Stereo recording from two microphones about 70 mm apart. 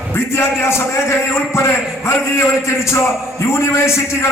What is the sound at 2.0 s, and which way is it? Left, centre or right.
A man's voice, left.